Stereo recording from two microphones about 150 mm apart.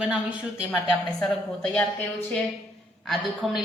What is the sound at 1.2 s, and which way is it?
Speech, 5° left (ahead or behind).